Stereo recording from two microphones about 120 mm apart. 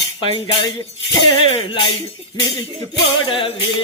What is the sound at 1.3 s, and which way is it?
Music, 45° left (ahead or behind).